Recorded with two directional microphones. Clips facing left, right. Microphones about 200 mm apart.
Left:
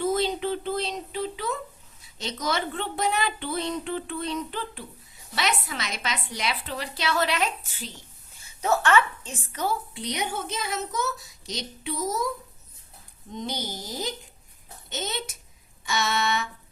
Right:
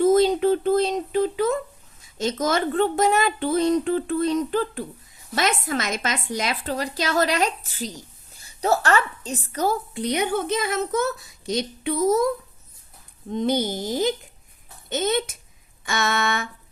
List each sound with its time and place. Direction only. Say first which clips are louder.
0.0 s a sound: right 8 dB; 45° right (ahead or behind)
2.0 s a woman's voice: right 10 dB; 50° right (ahead or behind)
13.3 s a woman's voice: right 10 dB; 55° right (ahead or behind)